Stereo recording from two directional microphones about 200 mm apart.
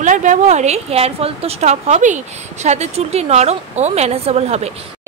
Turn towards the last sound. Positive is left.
turn(degrees=-30)  # may be behind; listen again after turning